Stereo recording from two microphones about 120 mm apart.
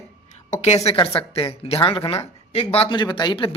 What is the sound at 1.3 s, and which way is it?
Speech, 50° left (ahead or behind).